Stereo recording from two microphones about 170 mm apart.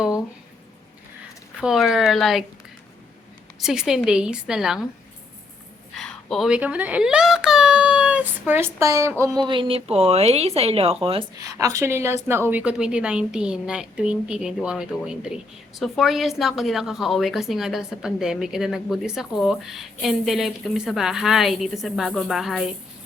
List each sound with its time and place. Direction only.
1.6 s a woman's voice: centre (ahead or behind)
3.6 s a woman's voice: 5° right (ahead or behind)
6.0 s a child's voice: 5° left (ahead or behind); by 11.3 s 35° right (ahead or behind)
11.3 s a woman's voice: 20° right (ahead or behind); by 22.6 s centre (ahead or behind)